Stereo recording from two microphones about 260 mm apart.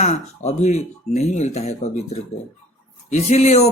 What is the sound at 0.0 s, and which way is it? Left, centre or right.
A man's voice, left.